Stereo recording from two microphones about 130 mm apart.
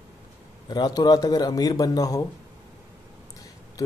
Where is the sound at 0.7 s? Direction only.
30° left (ahead or behind).